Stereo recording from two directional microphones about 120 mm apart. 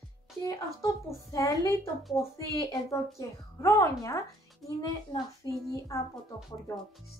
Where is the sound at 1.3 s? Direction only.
30° left (ahead or behind).